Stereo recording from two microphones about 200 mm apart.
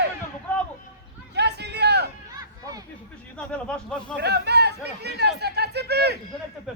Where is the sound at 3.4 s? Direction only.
5° left (ahead or behind).